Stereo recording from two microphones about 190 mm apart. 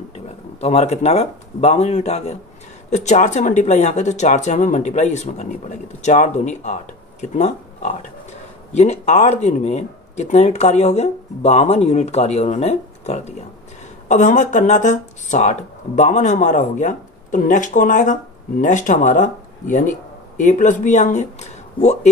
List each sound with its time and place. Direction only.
0.6 s speech: 35° left (ahead or behind)